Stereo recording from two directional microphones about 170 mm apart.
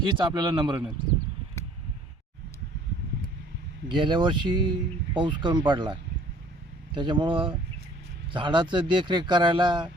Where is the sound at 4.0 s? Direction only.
25° right (ahead or behind).